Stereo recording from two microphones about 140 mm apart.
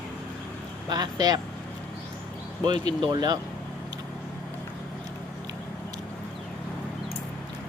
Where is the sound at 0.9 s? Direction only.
30° right (ahead or behind).